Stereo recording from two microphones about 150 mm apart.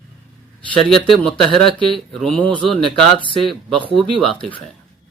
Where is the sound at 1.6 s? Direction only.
35° left (ahead or behind).